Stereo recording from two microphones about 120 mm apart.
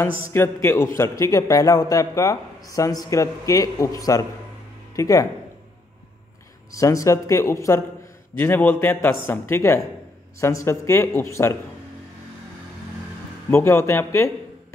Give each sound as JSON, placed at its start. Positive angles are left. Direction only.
{"t": 0.3, "sound": "a man's voice", "side_deg": 20}
{"t": 6.7, "sound": "a man's voice", "side_deg": 25}
{"t": 13.5, "sound": "a man's voice", "side_deg": 20}